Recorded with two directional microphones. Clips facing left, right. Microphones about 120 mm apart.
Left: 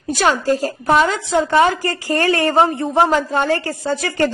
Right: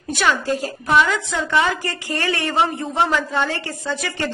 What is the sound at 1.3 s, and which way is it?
A woman's voice, 30° left (ahead or behind).